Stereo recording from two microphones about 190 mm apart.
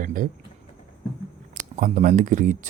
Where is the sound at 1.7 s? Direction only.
45° right (ahead or behind).